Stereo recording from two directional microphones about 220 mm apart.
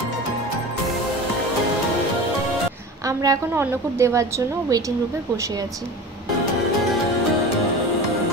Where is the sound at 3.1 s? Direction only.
15° right (ahead or behind).